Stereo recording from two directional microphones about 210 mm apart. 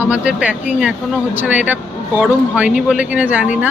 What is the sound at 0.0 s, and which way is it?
A woman's voice, 5° right (ahead or behind).